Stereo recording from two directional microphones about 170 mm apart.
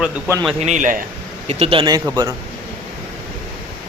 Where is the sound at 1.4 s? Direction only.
35° right (ahead or behind); by 2.3 s 20° right (ahead or behind).